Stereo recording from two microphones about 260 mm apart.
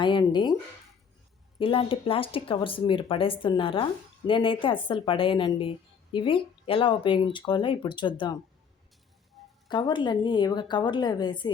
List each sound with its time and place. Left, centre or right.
0.0 s a woman's voice: centre
1.5 s speech: centre
9.6 s a woman's voice: centre